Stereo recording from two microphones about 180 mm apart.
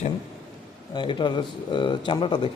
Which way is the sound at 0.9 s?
25° left (ahead or behind).